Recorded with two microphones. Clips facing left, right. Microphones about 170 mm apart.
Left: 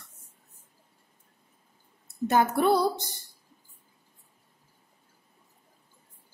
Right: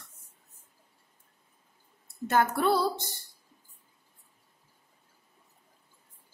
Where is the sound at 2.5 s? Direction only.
15° left (ahead or behind).